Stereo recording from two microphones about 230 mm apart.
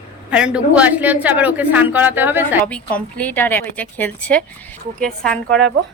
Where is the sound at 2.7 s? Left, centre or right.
Centre.